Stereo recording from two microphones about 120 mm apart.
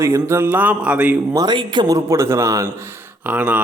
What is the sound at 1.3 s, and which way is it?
Speech, 35° right (ahead or behind).